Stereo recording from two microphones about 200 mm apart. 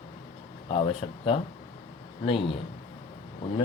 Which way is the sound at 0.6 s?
30° left (ahead or behind).